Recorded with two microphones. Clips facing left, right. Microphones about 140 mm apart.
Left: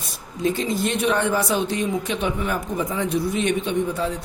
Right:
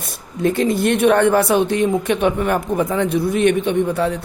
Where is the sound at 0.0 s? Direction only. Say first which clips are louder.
Right 4 dB; 60° right (ahead or behind).